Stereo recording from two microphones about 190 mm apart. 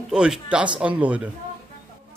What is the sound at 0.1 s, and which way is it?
A man's voice, 5° right (ahead or behind).